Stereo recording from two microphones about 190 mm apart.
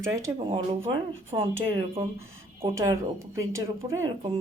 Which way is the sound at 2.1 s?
15° right (ahead or behind).